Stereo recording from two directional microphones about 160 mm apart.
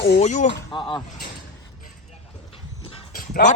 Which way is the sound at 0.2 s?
45° left (ahead or behind).